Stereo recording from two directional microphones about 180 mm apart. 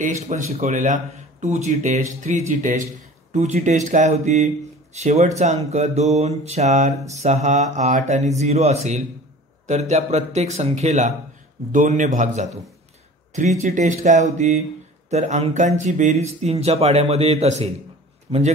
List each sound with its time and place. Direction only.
0.0 s a man's voice: 40° right (ahead or behind)